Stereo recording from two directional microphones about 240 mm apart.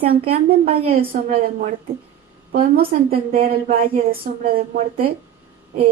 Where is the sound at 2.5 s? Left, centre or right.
Right.